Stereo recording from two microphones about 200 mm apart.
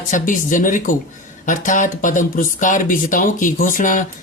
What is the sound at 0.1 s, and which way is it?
Speech, 40° left (ahead or behind).